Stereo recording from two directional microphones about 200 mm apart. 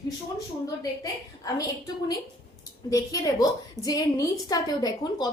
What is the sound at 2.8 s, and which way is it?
A woman's voice, 20° left (ahead or behind).